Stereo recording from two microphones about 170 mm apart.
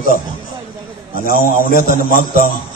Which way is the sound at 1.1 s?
60° left (ahead or behind).